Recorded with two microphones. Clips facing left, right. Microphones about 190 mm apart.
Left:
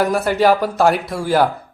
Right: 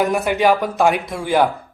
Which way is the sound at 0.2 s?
15° right (ahead or behind).